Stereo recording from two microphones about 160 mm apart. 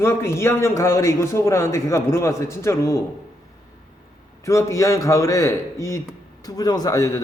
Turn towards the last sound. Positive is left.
turn(degrees=20)  # may be behind; listen again after turning